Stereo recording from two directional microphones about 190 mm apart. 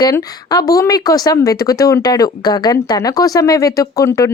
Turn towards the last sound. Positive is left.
turn(degrees=15)  # may be behind; listen again after turning